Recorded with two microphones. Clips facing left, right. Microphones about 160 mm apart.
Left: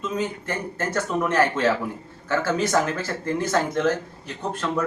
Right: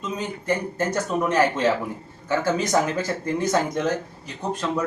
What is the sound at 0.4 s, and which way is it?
A man's voice, 15° right (ahead or behind).